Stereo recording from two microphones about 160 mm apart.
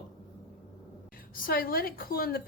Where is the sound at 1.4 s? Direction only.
65° left (ahead or behind).